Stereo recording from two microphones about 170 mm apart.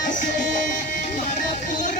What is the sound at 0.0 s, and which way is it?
Music, 50° left (ahead or behind).